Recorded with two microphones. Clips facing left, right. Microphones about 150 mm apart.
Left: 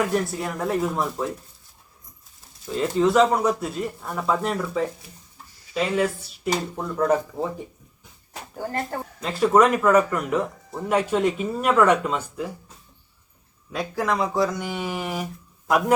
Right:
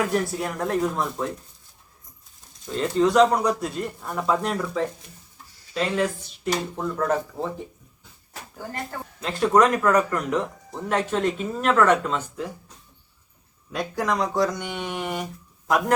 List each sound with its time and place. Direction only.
0.0 s speech: centre (ahead or behind)
2.6 s speech: 5° left (ahead or behind)
8.5 s speech: 45° left (ahead or behind)
9.2 s speech: 5° left (ahead or behind)
13.7 s speech: centre (ahead or behind)